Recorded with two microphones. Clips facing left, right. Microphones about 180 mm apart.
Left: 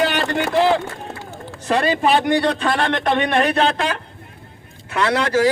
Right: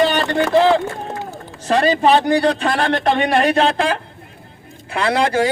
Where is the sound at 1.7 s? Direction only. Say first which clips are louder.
Right 3 dB; 35° right (ahead or behind).